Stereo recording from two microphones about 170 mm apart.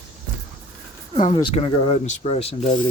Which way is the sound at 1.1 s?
40° left (ahead or behind).